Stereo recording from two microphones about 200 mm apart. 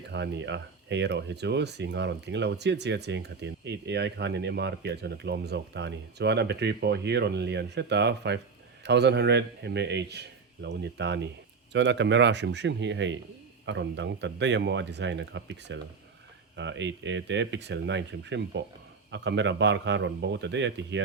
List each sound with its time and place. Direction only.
0.1 s speech: 60° right (ahead or behind)